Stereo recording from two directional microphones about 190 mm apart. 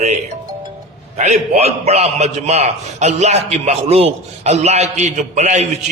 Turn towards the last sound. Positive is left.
turn(degrees=-40)  # may be behind; listen again after turning